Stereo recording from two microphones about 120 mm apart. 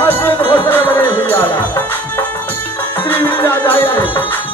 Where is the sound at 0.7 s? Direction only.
15° left (ahead or behind).